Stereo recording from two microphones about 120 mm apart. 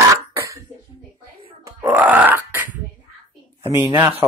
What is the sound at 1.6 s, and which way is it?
Grunt, 15° right (ahead or behind).